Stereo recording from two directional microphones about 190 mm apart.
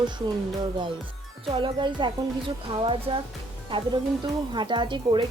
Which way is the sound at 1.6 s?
25° right (ahead or behind).